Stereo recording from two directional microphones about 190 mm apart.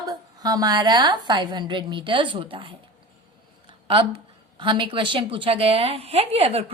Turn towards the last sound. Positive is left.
turn(degrees=-30)  # may be behind; listen again after turning